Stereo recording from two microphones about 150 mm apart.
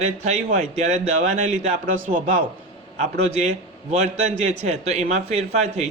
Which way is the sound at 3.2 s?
45° right (ahead or behind).